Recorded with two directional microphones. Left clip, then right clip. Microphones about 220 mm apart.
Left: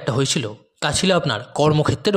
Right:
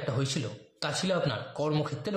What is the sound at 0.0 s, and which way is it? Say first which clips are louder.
A man's voice: left 11 dB; 40° left (ahead or behind).